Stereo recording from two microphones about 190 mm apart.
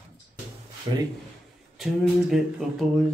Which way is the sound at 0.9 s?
20° right (ahead or behind).